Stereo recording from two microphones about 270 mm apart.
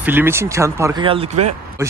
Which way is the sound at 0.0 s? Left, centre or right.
Centre.